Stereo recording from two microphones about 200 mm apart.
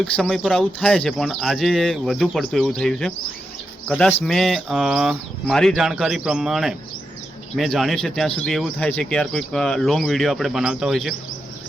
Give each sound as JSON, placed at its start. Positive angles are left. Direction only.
{"t": 0.0, "sound": "speech", "side_deg": 0}